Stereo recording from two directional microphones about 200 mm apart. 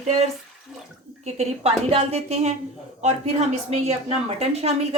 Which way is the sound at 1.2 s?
30° right (ahead or behind).